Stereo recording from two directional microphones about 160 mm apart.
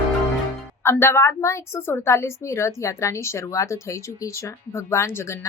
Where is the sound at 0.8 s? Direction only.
15° left (ahead or behind).